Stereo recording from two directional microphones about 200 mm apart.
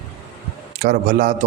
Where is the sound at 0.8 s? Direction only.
45° right (ahead or behind).